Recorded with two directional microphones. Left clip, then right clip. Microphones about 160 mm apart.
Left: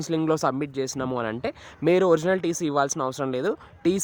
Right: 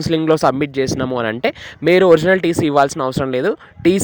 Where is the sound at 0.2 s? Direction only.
25° right (ahead or behind).